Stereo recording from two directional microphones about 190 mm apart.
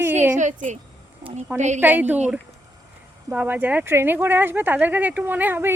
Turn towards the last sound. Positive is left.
turn(degrees=-10)  # may be behind; listen again after turning